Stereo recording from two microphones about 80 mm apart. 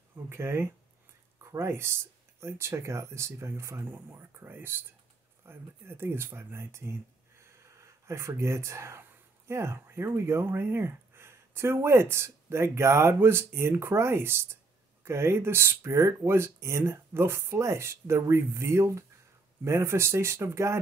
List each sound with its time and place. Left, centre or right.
0.1 s speech: right